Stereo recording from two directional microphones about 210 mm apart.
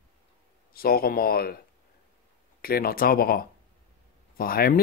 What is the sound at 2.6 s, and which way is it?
Speech, 45° left (ahead or behind).